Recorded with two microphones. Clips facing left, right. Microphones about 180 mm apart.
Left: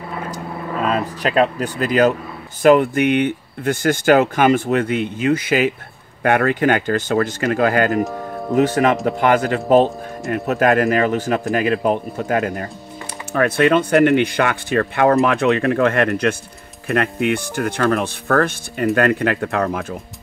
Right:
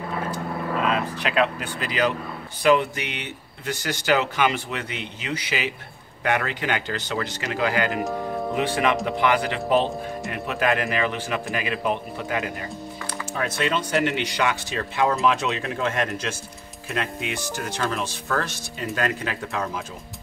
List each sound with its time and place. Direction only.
0.8 s speech: 40° left (ahead or behind)
13.3 s speech: 60° left (ahead or behind)